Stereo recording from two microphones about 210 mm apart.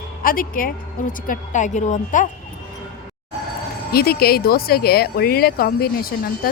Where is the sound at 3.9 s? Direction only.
45° left (ahead or behind).